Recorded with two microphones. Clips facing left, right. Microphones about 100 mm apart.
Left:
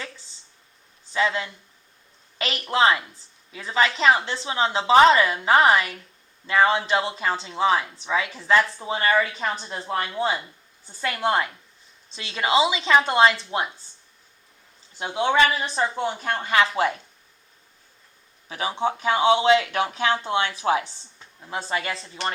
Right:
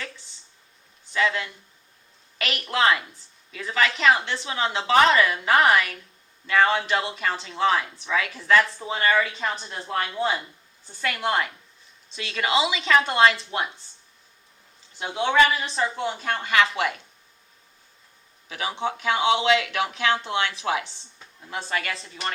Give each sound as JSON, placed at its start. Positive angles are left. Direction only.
{"t": 1.1, "sound": "speech", "side_deg": 30}
{"t": 14.9, "sound": "speech", "side_deg": 30}
{"t": 18.4, "sound": "speech", "side_deg": 30}